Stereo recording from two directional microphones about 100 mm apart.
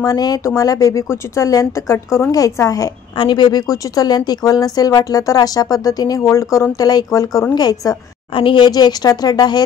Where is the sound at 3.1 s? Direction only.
50° left (ahead or behind).